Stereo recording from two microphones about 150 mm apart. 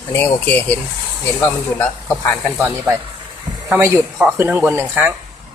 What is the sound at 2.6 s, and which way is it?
Speech, 15° right (ahead or behind).